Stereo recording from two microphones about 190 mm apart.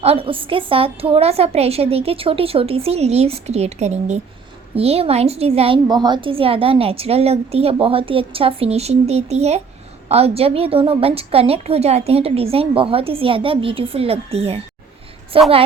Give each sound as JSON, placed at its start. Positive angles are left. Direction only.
{"t": 0.0, "sound": "a woman's voice", "side_deg": -30}